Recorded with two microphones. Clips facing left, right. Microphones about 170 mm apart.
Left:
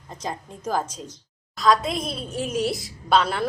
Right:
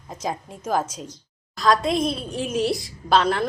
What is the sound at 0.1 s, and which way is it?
A woman's voice, 5° right (ahead or behind).